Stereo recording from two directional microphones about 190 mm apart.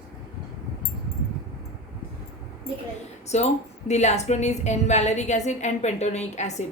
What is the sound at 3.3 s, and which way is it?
A woman's voice, 35° left (ahead or behind).